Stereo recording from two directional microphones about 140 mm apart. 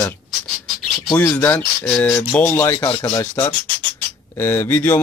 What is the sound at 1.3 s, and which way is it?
A man's voice, 15° left (ahead or behind).